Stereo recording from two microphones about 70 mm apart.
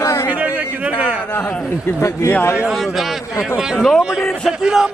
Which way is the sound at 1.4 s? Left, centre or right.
Centre.